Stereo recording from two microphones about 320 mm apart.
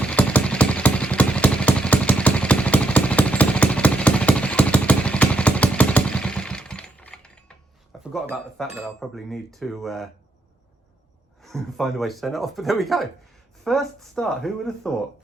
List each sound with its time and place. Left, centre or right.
0.0 s vehicle: centre
8.1 s cutlery: centre
11.4 s cutlery: centre